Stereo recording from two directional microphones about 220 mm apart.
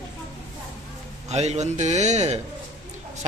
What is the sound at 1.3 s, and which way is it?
A man's voice, 30° right (ahead or behind).